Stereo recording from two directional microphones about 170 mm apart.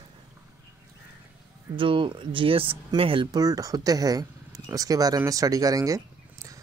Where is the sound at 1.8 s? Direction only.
30° right (ahead or behind).